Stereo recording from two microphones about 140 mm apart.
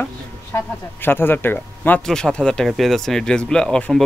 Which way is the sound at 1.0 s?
15° left (ahead or behind).